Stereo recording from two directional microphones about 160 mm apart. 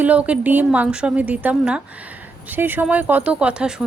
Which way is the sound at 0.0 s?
10° right (ahead or behind).